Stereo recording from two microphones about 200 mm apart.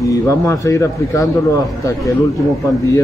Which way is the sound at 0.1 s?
15° left (ahead or behind).